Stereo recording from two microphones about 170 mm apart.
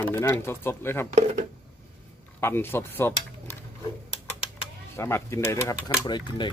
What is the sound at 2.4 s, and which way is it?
Speech, 15° left (ahead or behind).